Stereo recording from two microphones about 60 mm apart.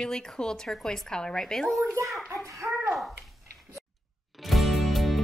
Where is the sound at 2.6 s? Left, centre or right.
Right.